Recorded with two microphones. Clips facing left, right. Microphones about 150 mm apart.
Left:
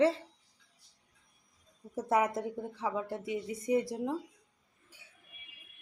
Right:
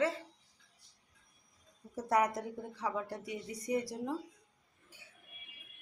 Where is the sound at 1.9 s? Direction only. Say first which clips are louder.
Left 2 dB; 25° left (ahead or behind).